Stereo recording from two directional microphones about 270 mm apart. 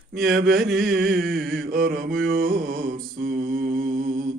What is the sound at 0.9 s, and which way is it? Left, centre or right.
Mantra, right.